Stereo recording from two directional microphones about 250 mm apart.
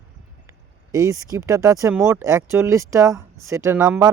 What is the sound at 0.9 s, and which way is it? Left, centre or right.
Speech, centre.